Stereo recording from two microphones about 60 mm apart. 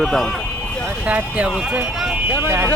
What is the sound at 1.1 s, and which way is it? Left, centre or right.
Speech, right.